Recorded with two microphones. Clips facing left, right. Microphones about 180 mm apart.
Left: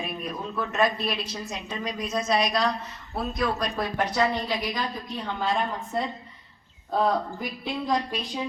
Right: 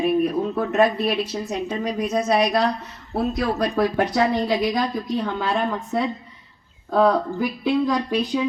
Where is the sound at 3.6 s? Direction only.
70° right (ahead or behind).